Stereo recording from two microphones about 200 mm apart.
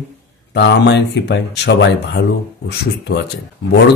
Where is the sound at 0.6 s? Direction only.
60° left (ahead or behind).